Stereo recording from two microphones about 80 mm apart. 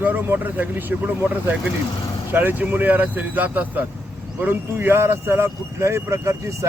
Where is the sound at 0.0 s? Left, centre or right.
Right.